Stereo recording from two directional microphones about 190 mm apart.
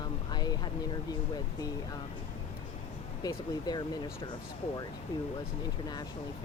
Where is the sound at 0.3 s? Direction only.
20° left (ahead or behind).